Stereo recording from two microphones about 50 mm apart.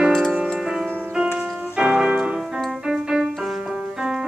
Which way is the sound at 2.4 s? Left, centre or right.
Centre.